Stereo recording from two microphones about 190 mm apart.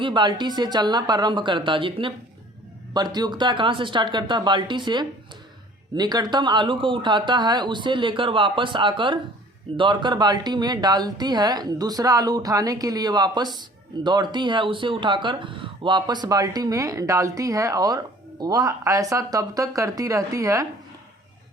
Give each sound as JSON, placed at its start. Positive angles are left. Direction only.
{"t": 0.0, "sound": "speech", "side_deg": -25}